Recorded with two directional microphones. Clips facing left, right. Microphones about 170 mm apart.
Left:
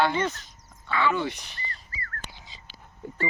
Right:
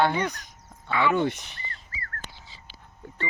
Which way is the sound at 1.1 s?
55° right (ahead or behind).